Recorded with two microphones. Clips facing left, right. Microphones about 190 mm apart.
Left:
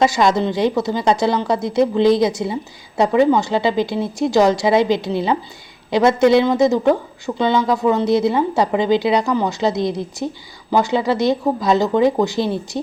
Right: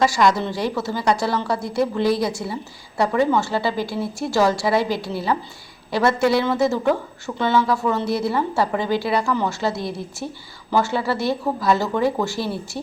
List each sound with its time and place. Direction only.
0.0 s a woman's voice: 20° left (ahead or behind)